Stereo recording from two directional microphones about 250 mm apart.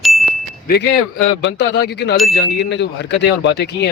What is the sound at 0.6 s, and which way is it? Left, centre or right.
Speech, left.